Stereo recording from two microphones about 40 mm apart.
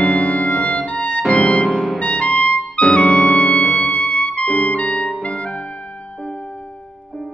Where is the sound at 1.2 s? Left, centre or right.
Centre.